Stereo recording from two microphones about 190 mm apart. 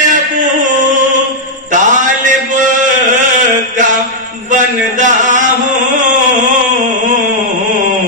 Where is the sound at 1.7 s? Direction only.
40° right (ahead or behind).